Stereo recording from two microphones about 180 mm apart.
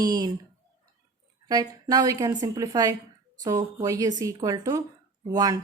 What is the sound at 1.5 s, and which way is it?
A woman's voice, 20° right (ahead or behind).